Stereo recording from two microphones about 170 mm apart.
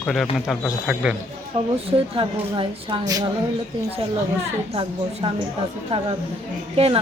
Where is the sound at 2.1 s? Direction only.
30° right (ahead or behind).